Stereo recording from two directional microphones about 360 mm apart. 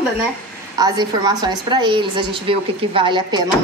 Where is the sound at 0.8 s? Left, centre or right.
Centre.